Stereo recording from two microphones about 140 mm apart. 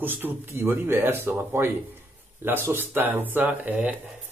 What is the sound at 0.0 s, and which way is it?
Speech, 15° right (ahead or behind).